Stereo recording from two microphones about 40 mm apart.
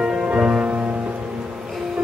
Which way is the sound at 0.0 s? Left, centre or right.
Right.